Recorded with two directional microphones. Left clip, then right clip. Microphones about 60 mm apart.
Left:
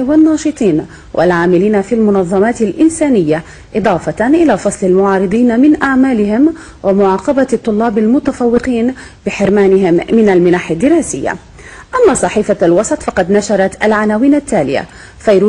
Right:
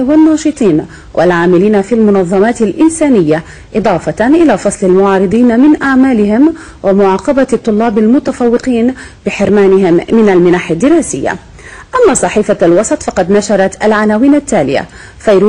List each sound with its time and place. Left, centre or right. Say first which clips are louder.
0.0 s a woman's voice: right 2 dB; right